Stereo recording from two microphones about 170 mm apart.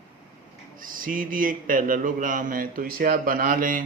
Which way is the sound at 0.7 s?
55° right (ahead or behind).